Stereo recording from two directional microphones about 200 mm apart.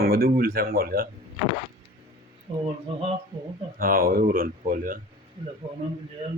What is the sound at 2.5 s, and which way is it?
Speech, 25° right (ahead or behind).